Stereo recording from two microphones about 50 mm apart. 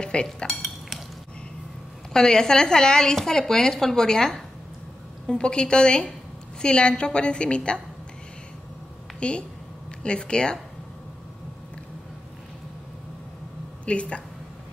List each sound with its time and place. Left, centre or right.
0.0 s a woman's voice: centre
0.7 s dishes: centre
2.1 s a woman's voice: centre
9.2 s a woman's voice: left
13.8 s a woman's voice: left